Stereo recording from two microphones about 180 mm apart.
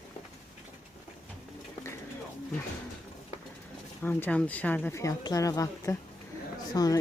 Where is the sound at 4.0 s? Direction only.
10° left (ahead or behind).